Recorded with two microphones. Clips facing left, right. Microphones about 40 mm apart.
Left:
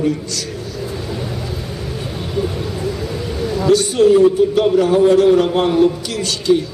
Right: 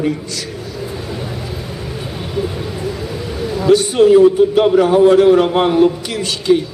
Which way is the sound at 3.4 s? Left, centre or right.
Centre.